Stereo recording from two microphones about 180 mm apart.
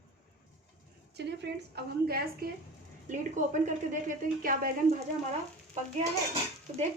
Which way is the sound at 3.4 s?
40° right (ahead or behind).